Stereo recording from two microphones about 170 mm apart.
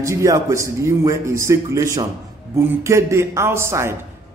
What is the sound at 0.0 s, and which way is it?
A man's voice, 20° right (ahead or behind).